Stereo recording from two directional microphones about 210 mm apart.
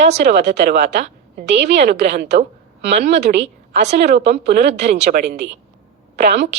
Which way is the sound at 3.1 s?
55° right (ahead or behind).